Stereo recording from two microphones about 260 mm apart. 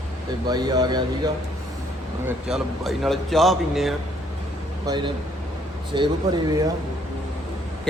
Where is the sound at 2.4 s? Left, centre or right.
Centre.